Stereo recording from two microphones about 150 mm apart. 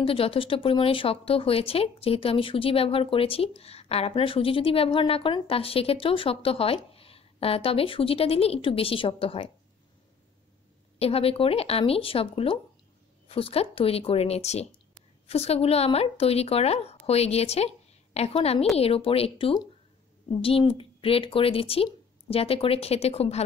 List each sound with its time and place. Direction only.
0.0 s speech: 40° left (ahead or behind)
11.0 s speech: 40° left (ahead or behind)